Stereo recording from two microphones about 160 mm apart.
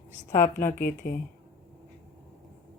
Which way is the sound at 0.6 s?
65° left (ahead or behind).